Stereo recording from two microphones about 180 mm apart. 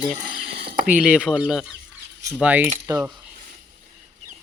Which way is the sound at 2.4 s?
10° right (ahead or behind).